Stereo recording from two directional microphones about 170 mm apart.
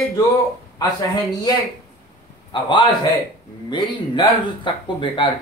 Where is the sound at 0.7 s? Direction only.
20° left (ahead or behind).